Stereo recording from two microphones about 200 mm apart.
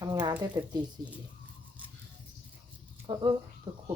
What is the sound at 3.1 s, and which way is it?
Speech, 20° right (ahead or behind).